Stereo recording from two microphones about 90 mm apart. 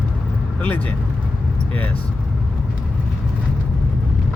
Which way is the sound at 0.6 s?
20° left (ahead or behind).